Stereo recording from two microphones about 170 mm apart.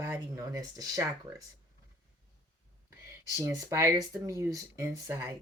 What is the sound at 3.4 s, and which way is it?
Speech, 20° right (ahead or behind).